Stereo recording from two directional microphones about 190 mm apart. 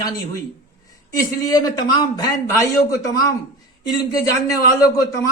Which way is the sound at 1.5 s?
20° left (ahead or behind).